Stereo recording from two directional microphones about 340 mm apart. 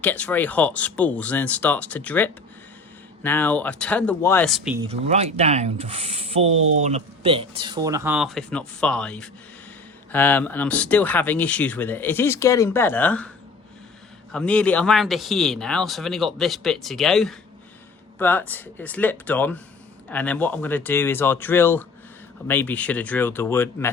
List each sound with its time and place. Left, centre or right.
0.0 s speech: centre
4.8 s speech: centre
14.3 s speech: centre